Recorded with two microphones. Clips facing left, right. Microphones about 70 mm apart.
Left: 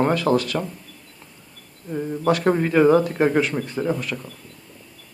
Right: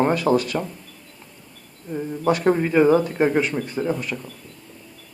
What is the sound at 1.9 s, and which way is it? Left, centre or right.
Speech, centre.